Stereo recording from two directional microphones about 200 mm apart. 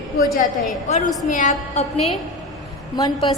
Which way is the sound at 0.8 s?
35° left (ahead or behind).